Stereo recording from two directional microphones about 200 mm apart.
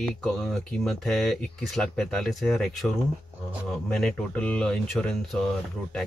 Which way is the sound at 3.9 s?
5° left (ahead or behind).